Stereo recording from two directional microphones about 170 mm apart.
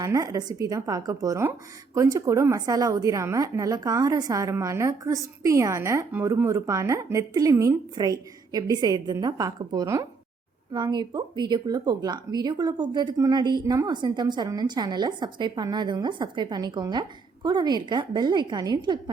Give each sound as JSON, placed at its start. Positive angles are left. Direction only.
{"t": 0.0, "sound": "speech", "side_deg": -20}